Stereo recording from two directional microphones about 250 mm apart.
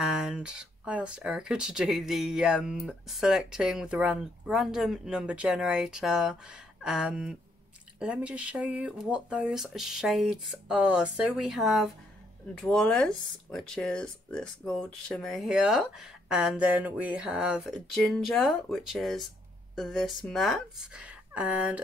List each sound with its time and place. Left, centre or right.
0.0 s speech: centre